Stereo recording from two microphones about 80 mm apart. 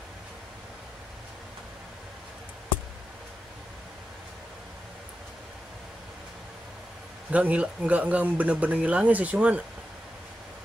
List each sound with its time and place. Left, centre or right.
7.2 s speech: centre